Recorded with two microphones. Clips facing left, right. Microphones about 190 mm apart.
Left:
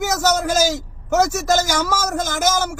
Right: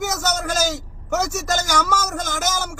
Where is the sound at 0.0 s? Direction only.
5° left (ahead or behind).